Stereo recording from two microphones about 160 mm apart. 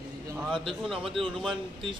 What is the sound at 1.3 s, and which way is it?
Speech, 30° right (ahead or behind).